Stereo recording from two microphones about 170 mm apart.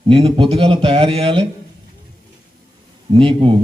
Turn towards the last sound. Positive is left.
turn(degrees=-30)  # may be behind; listen again after turning